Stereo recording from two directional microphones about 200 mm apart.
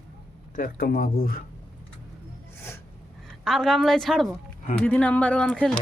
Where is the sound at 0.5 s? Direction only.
50° left (ahead or behind).